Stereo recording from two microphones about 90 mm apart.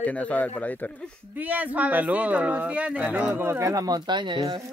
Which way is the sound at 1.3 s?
20° right (ahead or behind).